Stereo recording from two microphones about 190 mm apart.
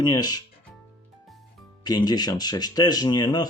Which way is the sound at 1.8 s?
20° left (ahead or behind).